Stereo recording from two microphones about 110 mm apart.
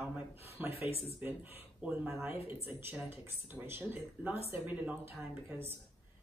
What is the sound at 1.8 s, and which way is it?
A woman's voice, 10° right (ahead or behind).